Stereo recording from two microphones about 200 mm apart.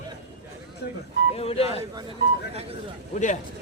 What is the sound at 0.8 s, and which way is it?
Vehicle, 55° left (ahead or behind).